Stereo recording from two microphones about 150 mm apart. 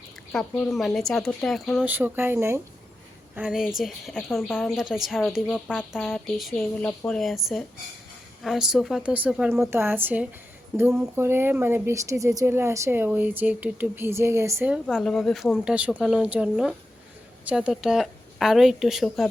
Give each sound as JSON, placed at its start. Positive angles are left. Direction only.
{"t": 0.3, "sound": "a woman's voice", "side_deg": 5}
{"t": 1.9, "sound": "speech", "side_deg": -15}
{"t": 3.3, "sound": "a woman's voice", "side_deg": -5}
{"t": 14.7, "sound": "a woman's voice", "side_deg": 0}